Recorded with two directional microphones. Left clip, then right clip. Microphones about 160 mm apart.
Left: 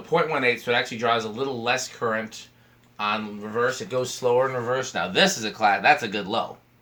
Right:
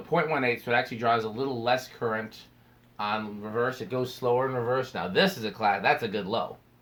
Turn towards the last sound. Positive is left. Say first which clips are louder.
# left 5 dB
turn(degrees=-20)  # may be behind; listen again after turning